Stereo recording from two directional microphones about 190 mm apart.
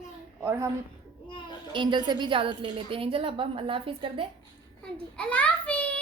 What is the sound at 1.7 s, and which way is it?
A woman's voice, 25° right (ahead or behind).